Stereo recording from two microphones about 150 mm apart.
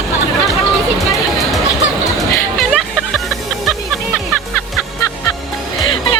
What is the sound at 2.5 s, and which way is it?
Music, centre (ahead or behind).